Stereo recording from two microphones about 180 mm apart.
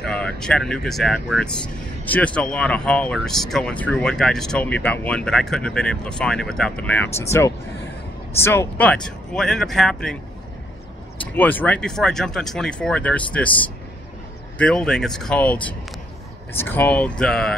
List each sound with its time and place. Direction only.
0.0 s speech: 5° left (ahead or behind)
8.4 s speech: 15° left (ahead or behind)
11.3 s speech: 10° left (ahead or behind)
14.6 s speech: 5° left (ahead or behind)